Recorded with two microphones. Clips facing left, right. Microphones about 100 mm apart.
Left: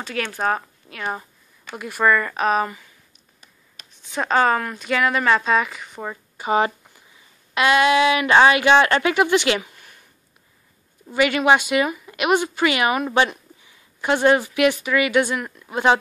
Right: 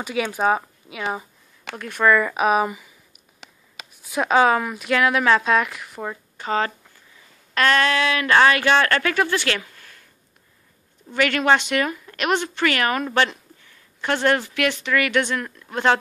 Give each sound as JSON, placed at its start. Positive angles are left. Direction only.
{"t": 0.0, "sound": "speech", "side_deg": -10}
{"t": 1.8, "sound": "speech", "side_deg": 5}
{"t": 3.9, "sound": "a woman's voice", "side_deg": -5}
{"t": 11.1, "sound": "a woman's voice", "side_deg": 10}